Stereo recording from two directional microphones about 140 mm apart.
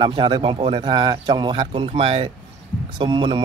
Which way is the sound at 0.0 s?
35° right (ahead or behind).